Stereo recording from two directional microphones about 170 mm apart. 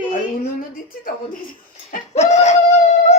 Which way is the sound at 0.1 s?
55° left (ahead or behind).